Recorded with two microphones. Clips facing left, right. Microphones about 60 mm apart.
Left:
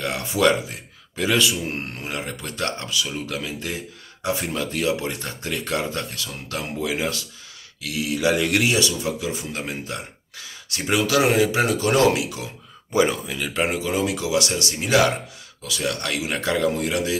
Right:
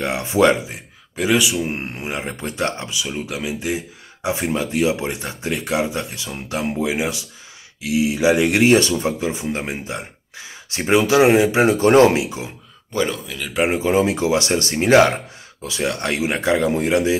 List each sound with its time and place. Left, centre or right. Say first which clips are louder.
0.0 s speech: right 4 dB; right
1.1 s speech: right 3 dB; centre
8.6 s speech: right 7 dB; right
12.9 s speech: left 2 dB; centre
13.7 s speech: right 6 dB; right